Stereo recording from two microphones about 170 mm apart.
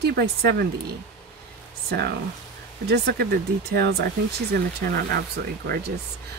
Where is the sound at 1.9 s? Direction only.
70° right (ahead or behind).